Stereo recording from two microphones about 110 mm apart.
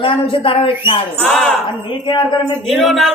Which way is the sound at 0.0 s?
55° left (ahead or behind).